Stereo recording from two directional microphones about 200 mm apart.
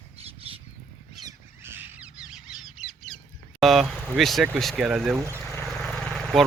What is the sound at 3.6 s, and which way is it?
Speech, centre (ahead or behind).